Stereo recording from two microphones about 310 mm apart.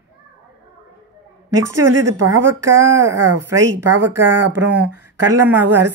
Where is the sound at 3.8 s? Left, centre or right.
Right.